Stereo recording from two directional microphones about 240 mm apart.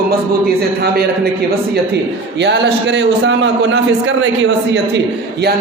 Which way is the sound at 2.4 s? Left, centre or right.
Right.